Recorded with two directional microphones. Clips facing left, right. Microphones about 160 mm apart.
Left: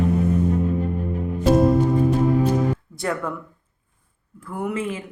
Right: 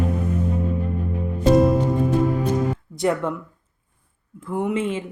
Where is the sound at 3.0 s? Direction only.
20° right (ahead or behind).